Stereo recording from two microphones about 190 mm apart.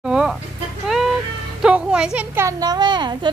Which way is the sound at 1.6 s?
5° right (ahead or behind).